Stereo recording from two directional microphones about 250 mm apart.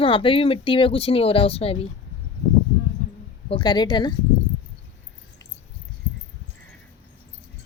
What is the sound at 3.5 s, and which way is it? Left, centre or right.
Speech, centre.